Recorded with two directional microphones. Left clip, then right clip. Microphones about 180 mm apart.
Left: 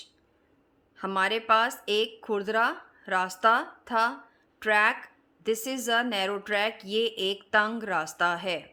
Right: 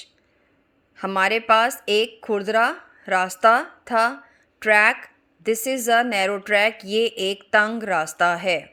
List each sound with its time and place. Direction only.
0.9 s speech: 30° right (ahead or behind)